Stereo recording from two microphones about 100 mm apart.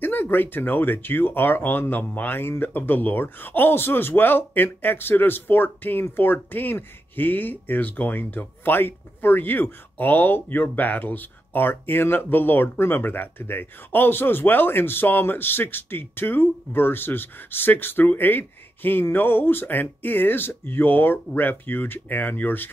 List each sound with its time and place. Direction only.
0.0 s speech: 20° left (ahead or behind)